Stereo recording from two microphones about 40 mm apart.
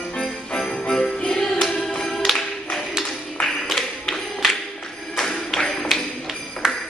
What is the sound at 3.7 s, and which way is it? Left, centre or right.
Music, centre.